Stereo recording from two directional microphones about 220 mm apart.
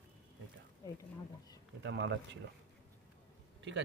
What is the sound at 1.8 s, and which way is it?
Speech, 55° right (ahead or behind).